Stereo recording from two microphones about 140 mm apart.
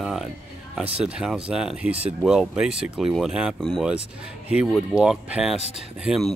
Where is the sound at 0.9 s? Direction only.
5° right (ahead or behind).